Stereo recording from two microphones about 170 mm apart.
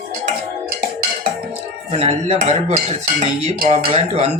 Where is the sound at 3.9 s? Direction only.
40° right (ahead or behind).